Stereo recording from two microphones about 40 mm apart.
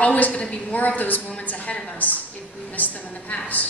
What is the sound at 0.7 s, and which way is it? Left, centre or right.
A woman's voice, left.